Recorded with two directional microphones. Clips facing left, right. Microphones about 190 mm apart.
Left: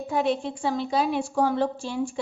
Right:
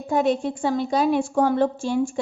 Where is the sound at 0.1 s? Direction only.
45° right (ahead or behind).